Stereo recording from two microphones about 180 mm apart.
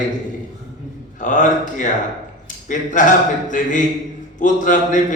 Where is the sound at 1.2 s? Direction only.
45° left (ahead or behind).